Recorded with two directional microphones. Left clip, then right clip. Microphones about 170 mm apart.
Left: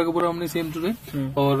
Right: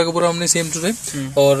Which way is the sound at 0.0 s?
35° right (ahead or behind).